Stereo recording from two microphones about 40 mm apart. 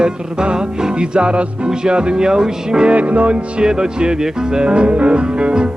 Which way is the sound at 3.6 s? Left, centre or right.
Centre.